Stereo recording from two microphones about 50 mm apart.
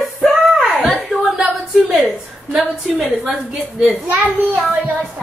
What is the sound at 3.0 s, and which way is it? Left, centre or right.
Speech, centre.